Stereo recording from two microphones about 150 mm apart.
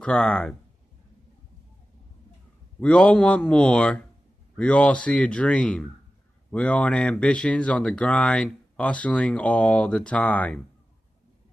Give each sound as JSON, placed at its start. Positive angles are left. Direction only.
{"t": 0.0, "sound": "speech", "side_deg": 5}
{"t": 2.8, "sound": "speech", "side_deg": 5}